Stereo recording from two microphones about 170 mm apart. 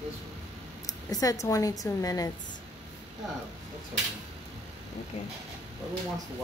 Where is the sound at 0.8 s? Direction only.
20° left (ahead or behind).